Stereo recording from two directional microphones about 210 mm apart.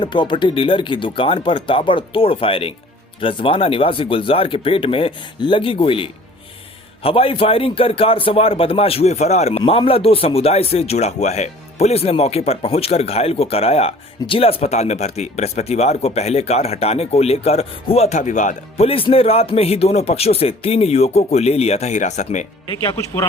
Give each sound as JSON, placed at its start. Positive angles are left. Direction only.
{"t": 0.0, "sound": "a man's voice", "side_deg": 20}
{"t": 22.7, "sound": "a man's voice", "side_deg": 20}